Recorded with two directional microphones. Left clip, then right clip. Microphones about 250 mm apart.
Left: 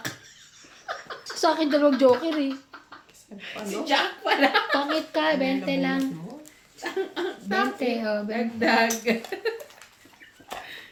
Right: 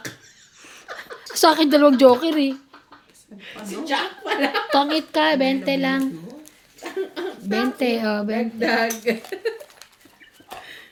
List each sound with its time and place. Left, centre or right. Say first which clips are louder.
1.4 s speech: right 7 dB; right
3.8 s speech: left 1 dB; centre
4.7 s speech: right 5 dB; right
6.8 s a sound: right 1 dB; centre
7.5 s speech: right 3 dB; right
8.5 s speech: left 1 dB; centre
10.5 s a sound: left 1 dB; centre